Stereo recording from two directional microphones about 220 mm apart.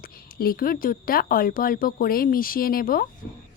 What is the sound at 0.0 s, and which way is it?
Speech, 40° left (ahead or behind).